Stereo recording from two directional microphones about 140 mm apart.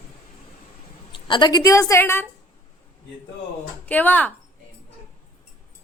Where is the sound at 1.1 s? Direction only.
35° left (ahead or behind); by 2.2 s 15° left (ahead or behind).